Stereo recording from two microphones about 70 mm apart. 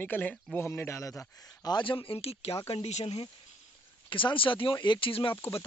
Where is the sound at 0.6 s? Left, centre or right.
Left.